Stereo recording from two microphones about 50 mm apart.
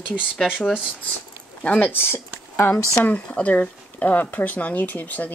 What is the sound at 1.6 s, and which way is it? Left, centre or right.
Speech, left.